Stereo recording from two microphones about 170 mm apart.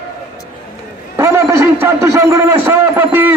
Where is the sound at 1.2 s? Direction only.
15° right (ahead or behind).